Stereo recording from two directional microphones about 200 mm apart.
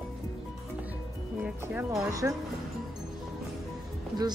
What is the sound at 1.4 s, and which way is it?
Music, 5° right (ahead or behind).